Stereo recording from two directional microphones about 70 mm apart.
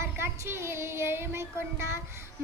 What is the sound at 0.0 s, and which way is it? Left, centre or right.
Child singing, right.